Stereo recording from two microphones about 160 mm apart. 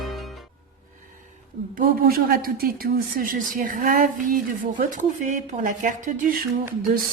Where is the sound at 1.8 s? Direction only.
65° right (ahead or behind).